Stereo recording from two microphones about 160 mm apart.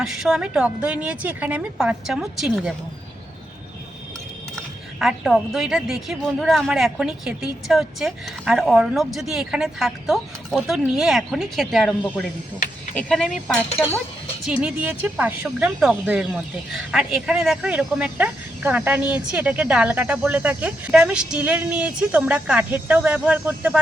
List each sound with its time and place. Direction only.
0.0 s speech: 5° right (ahead or behind)
4.9 s a woman's voice: centre (ahead or behind)
13.7 s speech: 40° left (ahead or behind)
14.4 s speech: 5° right (ahead or behind)